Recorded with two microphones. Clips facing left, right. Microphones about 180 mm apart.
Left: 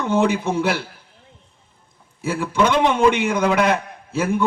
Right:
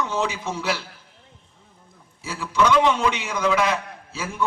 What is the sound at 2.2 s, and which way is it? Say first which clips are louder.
A man's voice: left 3 dB; 55° left (ahead or behind).